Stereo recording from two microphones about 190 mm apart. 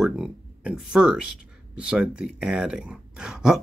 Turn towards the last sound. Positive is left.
turn(degrees=-5)  # may be behind; listen again after turning